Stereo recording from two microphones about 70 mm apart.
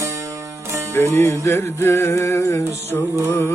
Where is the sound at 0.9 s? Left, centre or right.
Left.